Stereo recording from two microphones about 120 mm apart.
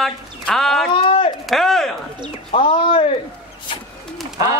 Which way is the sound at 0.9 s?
50° left (ahead or behind).